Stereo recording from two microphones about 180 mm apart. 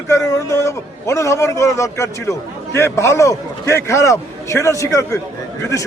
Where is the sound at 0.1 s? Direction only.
15° left (ahead or behind).